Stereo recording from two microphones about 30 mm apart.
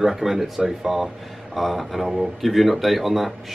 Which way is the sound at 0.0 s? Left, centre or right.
Centre.